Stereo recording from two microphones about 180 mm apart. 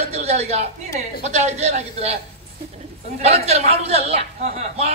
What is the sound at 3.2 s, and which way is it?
A man's voice, 35° right (ahead or behind).